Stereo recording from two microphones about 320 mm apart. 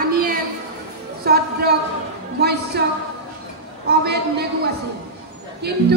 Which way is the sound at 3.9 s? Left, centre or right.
Right.